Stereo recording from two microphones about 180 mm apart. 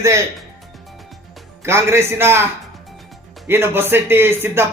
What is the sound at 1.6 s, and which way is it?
A man's voice, 15° right (ahead or behind).